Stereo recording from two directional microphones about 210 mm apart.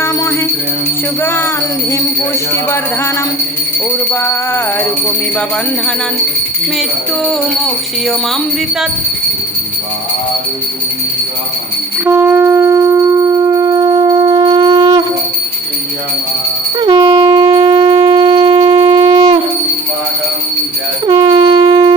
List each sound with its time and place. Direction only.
1.2 s music: 10° left (ahead or behind)
4.1 s music: 10° left (ahead or behind)
7.3 s music: centre (ahead or behind)
12.0 s shofar: 10° right (ahead or behind)
16.8 s shofar: 20° right (ahead or behind)
21.1 s music: 20° right (ahead or behind)